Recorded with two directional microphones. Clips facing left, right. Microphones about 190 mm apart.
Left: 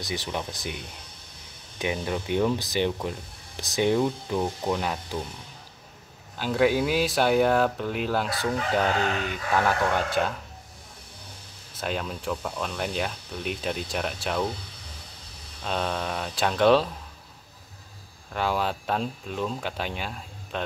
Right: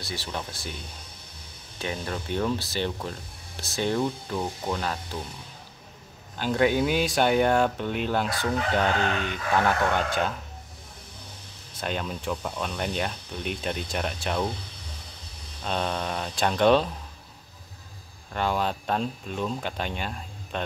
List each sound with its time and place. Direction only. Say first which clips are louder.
0.0 s speech: left 3 dB; 15° left (ahead or behind)
1.8 s speech: left 3 dB; 15° left (ahead or behind)
6.3 s speech: left 1 dB; 5° left (ahead or behind)
11.8 s speech: even; centre (ahead or behind)
15.6 s speech: even; centre (ahead or behind)
18.3 s speech: even; 5° left (ahead or behind)